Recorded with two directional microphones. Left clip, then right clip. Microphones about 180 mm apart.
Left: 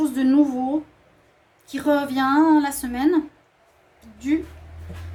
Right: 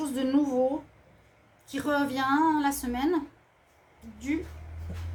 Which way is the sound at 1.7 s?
45° left (ahead or behind).